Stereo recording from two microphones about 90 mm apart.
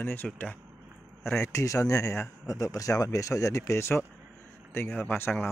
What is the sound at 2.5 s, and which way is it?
Speech, 40° left (ahead or behind).